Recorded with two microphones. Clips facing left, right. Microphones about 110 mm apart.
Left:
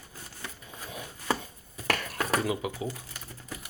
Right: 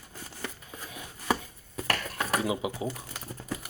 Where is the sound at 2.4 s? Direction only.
20° right (ahead or behind).